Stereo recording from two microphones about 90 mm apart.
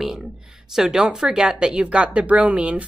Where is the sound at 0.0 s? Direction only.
5° right (ahead or behind).